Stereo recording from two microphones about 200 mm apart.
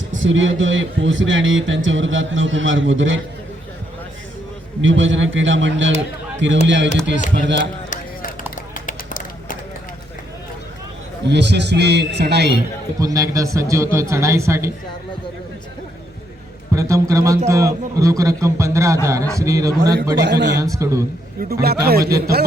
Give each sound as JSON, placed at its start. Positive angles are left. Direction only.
{"t": 0.1, "sound": "a man's voice", "side_deg": -75}
{"t": 4.8, "sound": "a man's voice", "side_deg": -70}
{"t": 7.6, "sound": "a sound", "side_deg": 40}
{"t": 11.3, "sound": "a man's voice", "side_deg": -60}
{"t": 13.0, "sound": "a man's voice", "side_deg": -15}
{"t": 16.7, "sound": "a man's voice", "side_deg": -15}
{"t": 21.5, "sound": "speech", "side_deg": -50}